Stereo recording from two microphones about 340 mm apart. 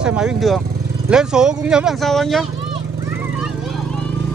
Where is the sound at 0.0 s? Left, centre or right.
Centre.